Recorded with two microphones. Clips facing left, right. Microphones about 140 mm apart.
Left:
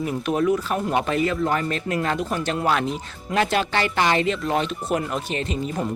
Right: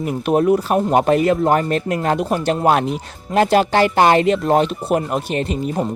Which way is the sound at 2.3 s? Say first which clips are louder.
Right 8 dB; 40° right (ahead or behind).